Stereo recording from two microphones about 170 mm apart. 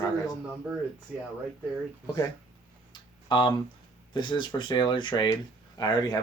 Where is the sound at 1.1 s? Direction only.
5° right (ahead or behind).